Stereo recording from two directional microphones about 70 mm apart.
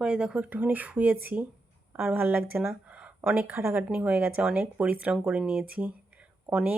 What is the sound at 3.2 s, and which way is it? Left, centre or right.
Speech, right.